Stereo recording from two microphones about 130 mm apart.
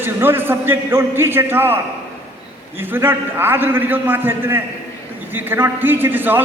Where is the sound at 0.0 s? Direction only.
15° right (ahead or behind).